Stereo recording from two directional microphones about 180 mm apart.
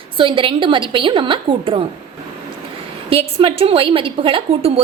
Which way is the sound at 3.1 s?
30° right (ahead or behind).